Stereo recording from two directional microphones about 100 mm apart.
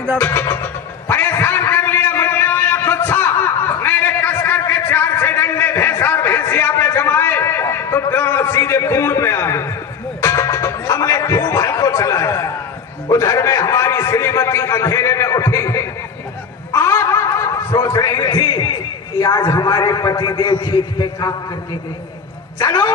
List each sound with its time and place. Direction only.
0.2 s music: 20° left (ahead or behind)
8.1 s a man's voice: 20° left (ahead or behind)
10.2 s music: 30° left (ahead or behind)
13.1 s a man's voice: 30° left (ahead or behind)
16.7 s snicker: 30° left (ahead or behind)
17.8 s a man's voice: 35° left (ahead or behind)